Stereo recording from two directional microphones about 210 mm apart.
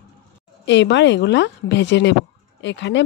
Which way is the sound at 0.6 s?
60° left (ahead or behind).